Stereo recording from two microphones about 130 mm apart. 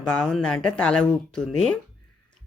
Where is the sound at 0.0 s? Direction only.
10° left (ahead or behind).